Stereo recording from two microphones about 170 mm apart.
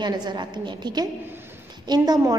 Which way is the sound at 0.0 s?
25° right (ahead or behind).